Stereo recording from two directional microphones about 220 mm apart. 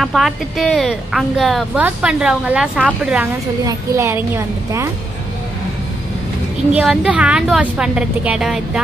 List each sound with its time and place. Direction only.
0.0 s a woman's voice: centre (ahead or behind)
6.7 s speech: 5° right (ahead or behind)